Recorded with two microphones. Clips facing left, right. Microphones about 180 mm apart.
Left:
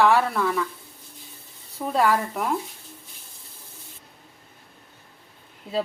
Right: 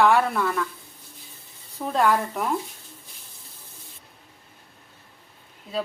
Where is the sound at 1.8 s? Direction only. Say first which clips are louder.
Even; 5° left (ahead or behind).